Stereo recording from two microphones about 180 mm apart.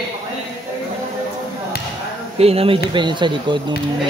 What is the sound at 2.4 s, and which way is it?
Speech, 35° right (ahead or behind).